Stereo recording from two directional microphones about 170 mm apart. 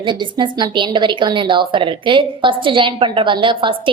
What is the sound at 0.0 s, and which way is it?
A woman's voice, 30° right (ahead or behind).